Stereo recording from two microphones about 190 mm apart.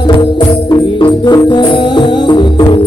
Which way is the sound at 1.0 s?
25° left (ahead or behind).